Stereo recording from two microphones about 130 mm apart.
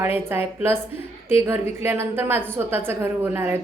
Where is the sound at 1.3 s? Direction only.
20° right (ahead or behind).